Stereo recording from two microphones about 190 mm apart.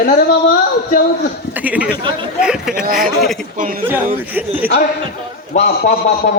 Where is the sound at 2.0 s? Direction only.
25° right (ahead or behind).